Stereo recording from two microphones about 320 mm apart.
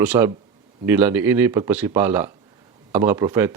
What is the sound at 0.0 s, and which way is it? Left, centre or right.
Speech, centre.